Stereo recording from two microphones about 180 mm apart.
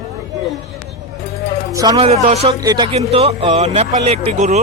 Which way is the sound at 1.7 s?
20° right (ahead or behind).